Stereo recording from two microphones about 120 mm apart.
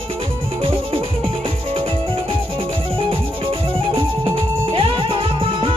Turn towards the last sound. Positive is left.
turn(degrees=-50)  # may be behind; listen again after turning